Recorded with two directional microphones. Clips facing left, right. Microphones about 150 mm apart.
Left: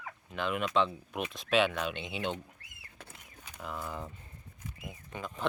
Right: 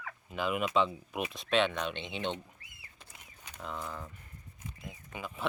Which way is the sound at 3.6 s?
5° left (ahead or behind).